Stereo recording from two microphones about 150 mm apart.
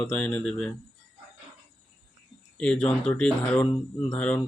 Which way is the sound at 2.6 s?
5° left (ahead or behind).